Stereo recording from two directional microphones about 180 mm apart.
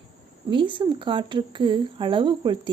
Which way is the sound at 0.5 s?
25° right (ahead or behind).